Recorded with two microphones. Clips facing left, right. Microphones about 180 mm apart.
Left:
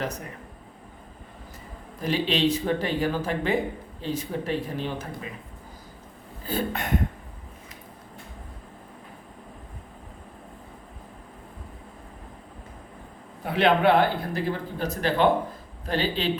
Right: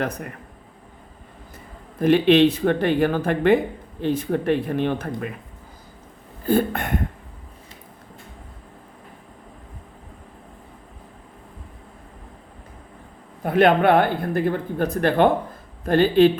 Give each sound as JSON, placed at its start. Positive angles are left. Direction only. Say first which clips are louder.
{"t": 2.0, "sound": "speech", "louder": "right 10 dB", "side_deg": -60}
{"t": 6.4, "sound": "speech", "louder": "right 8 dB", "side_deg": -55}
{"t": 13.4, "sound": "speech", "louder": "right 4 dB", "side_deg": -50}